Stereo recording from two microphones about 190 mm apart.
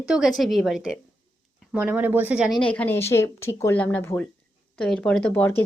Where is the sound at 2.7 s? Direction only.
10° left (ahead or behind).